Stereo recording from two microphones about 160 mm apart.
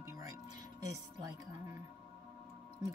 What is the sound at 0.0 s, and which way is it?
Music, 20° right (ahead or behind).